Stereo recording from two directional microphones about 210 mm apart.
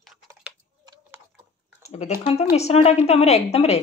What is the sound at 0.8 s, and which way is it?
Tick-tock, 20° right (ahead or behind).